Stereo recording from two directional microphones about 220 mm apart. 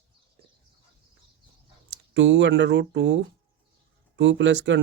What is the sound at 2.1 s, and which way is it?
Speech, 55° right (ahead or behind).